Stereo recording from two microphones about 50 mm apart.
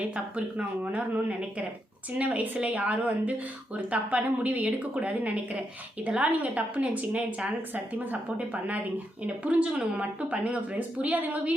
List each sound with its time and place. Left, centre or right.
0.0 s a woman's voice: right